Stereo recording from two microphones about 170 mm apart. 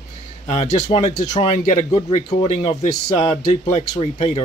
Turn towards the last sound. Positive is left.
turn(degrees=35)  # may be behind; listen again after turning